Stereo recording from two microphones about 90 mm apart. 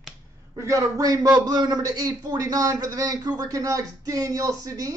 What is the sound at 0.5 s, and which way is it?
A man's voice, 35° right (ahead or behind).